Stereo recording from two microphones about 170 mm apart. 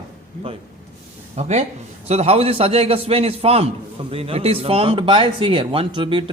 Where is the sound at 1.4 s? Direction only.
40° right (ahead or behind).